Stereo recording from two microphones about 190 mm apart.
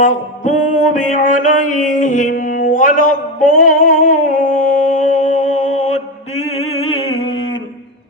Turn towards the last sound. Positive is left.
turn(degrees=30)  # may be behind; listen again after turning